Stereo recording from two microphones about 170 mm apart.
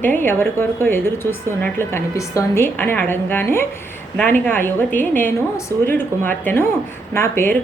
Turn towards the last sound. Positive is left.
turn(degrees=15)  # may be behind; listen again after turning